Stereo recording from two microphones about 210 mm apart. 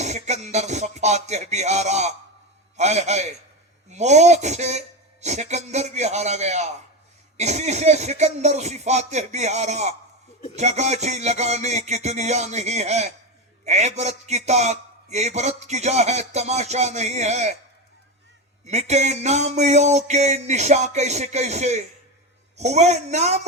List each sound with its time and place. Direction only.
0.0 s a man's voice: 35° right (ahead or behind)
18.6 s a man's voice: 30° right (ahead or behind)